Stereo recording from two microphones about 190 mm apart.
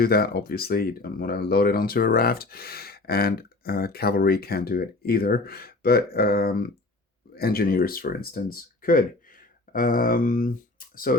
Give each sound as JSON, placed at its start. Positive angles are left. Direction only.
{"t": 0.0, "sound": "speech", "side_deg": 55}